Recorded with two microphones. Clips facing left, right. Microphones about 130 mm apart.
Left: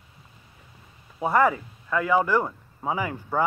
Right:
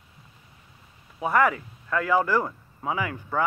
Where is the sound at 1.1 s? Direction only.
25° left (ahead or behind).